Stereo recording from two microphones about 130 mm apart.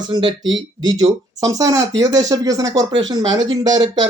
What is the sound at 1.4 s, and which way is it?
Speech, 30° right (ahead or behind).